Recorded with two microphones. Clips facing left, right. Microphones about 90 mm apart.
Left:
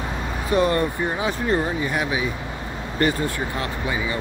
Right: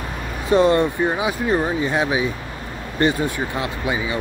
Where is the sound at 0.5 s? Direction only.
25° right (ahead or behind).